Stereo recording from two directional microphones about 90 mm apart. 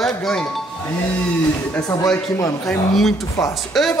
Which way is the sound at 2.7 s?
Centre (ahead or behind).